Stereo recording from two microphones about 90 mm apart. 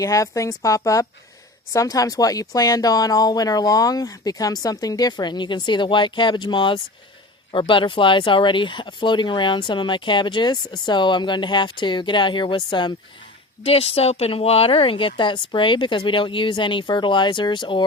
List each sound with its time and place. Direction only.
0.0 s a woman's voice: 40° left (ahead or behind); by 12.9 s 60° left (ahead or behind)
13.6 s speech: 90° left; by 17.8 s 60° left (ahead or behind)